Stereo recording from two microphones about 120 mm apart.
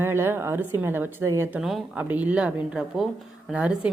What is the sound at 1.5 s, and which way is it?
Speech, 5° right (ahead or behind).